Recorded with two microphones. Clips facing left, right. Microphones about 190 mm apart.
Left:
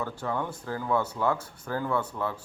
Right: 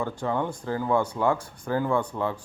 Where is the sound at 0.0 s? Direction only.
15° right (ahead or behind).